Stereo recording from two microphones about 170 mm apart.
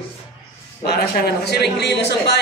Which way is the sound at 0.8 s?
70° left (ahead or behind).